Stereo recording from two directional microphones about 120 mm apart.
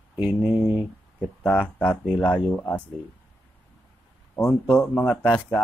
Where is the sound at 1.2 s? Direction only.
10° left (ahead or behind).